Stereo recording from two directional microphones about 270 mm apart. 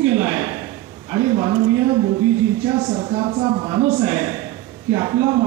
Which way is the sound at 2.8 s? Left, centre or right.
Centre.